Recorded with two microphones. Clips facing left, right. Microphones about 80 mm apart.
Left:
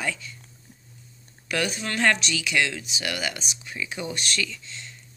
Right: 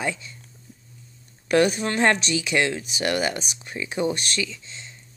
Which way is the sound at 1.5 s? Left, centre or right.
Right.